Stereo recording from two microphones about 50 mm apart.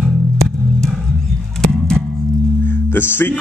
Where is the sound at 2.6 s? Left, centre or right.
Left.